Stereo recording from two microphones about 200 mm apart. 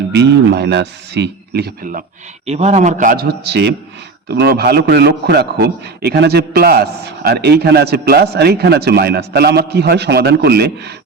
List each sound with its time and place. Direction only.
0.1 s a man's voice: 60° right (ahead or behind)
2.5 s a man's voice: 35° right (ahead or behind); by 10.9 s 55° right (ahead or behind)